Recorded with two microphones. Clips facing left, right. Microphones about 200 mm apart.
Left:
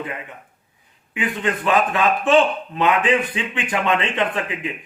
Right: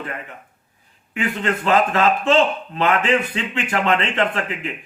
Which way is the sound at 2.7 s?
15° left (ahead or behind).